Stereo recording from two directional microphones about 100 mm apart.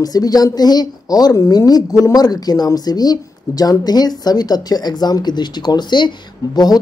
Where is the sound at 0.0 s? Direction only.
40° left (ahead or behind).